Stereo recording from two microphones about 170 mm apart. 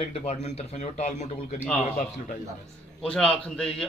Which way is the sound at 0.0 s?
35° left (ahead or behind).